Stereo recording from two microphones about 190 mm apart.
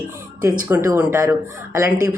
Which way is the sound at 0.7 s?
15° right (ahead or behind).